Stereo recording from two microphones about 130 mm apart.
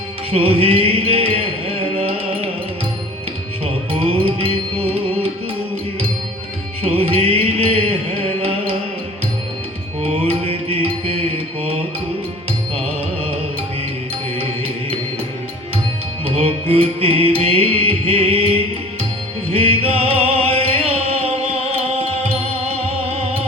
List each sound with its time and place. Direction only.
0.3 s music: 45° right (ahead or behind)
3.9 s music: 45° right (ahead or behind)
6.8 s music: 50° right (ahead or behind)
10.0 s mantra: 50° right (ahead or behind)
16.2 s music: 50° right (ahead or behind)